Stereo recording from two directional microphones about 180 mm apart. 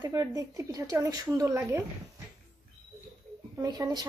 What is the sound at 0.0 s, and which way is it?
A woman's voice, 20° right (ahead or behind).